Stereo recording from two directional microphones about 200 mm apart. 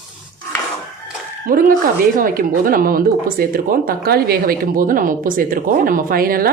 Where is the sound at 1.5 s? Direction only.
45° right (ahead or behind).